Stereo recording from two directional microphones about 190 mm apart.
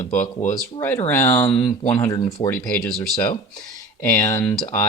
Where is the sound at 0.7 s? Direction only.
10° left (ahead or behind).